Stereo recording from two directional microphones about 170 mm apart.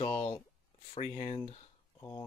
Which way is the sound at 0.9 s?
40° left (ahead or behind).